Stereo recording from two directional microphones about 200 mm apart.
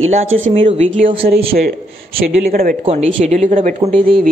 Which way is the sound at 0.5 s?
30° right (ahead or behind).